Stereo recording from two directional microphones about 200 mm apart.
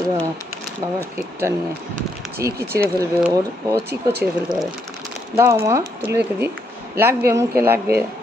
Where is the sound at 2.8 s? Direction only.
10° right (ahead or behind).